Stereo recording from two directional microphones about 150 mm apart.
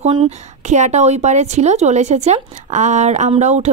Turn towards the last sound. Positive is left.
turn(degrees=-50)  # may be behind; listen again after turning